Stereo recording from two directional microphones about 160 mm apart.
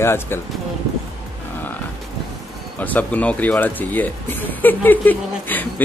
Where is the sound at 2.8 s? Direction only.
10° left (ahead or behind).